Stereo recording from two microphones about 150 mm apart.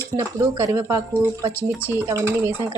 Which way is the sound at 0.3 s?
20° right (ahead or behind).